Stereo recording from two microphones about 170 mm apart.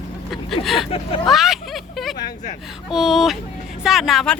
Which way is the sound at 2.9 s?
Centre (ahead or behind).